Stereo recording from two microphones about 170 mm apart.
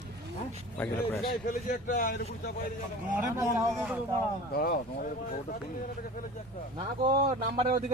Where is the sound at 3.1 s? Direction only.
20° right (ahead or behind).